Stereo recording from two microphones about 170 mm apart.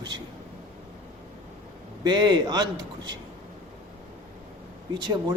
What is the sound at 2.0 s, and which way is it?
A man's voice, 25° right (ahead or behind).